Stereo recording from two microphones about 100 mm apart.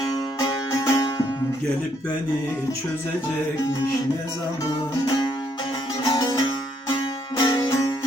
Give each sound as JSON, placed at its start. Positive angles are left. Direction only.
{"t": 0.0, "sound": "music", "side_deg": 40}
{"t": 5.0, "sound": "music", "side_deg": 40}